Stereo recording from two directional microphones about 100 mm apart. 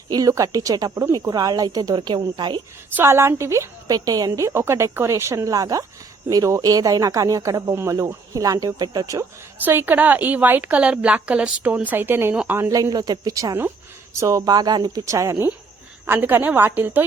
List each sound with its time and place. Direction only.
0.1 s speech: 35° right (ahead or behind)
2.9 s a woman's voice: 25° right (ahead or behind)
9.6 s a woman's voice: 20° right (ahead or behind)
12.5 s speech: 30° right (ahead or behind)
15.0 s speech: 30° right (ahead or behind)
16.0 s a woman's voice: 20° right (ahead or behind)